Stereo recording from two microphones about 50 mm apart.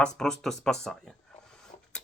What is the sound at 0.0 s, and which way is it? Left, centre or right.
Speech, centre.